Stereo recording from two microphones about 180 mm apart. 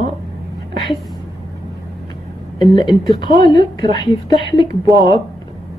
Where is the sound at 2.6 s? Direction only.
25° left (ahead or behind).